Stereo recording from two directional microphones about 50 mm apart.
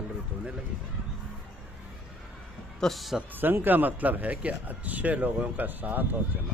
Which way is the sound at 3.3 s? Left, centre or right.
Right.